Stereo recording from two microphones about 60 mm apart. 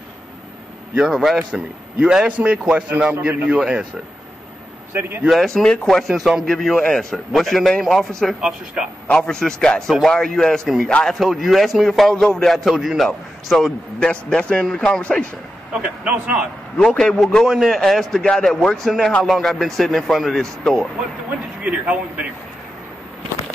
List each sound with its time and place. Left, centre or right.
1.0 s speech: centre
1.5 s a man's voice: centre
3.1 s a man's voice: right
3.4 s a man's voice: centre
5.3 s a man's voice: centre
8.4 s a man's voice: centre
9.0 s a man's voice: centre
11.1 s speech: centre
13.9 s a man's voice: centre
16.0 s a man's voice: right
16.8 s a man's voice: centre
17.5 s speech: centre
17.7 s a man's voice: centre
21.6 s a man's voice: right